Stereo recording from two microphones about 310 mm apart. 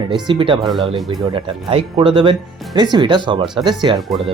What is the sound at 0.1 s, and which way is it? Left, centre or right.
Speech, centre.